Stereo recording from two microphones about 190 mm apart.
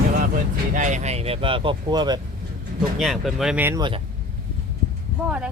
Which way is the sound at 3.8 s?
25° right (ahead or behind).